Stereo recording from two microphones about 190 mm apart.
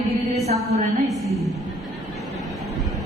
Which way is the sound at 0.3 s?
35° right (ahead or behind).